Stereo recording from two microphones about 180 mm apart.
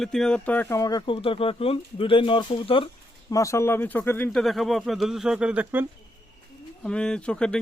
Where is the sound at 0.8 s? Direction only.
20° left (ahead or behind).